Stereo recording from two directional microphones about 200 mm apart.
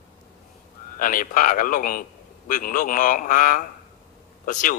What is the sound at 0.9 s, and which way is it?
Speech, 45° left (ahead or behind).